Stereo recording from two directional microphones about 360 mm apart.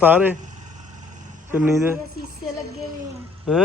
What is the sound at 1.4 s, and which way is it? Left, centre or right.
Speech, centre.